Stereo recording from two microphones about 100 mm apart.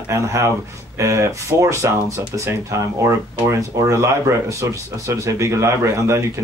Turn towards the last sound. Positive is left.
turn(degrees=-30)  # may be behind; listen again after turning